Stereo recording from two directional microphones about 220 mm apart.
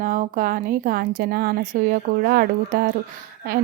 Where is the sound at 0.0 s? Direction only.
35° right (ahead or behind).